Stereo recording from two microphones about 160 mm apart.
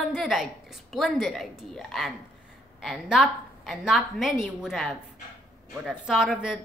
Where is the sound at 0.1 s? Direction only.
Centre (ahead or behind).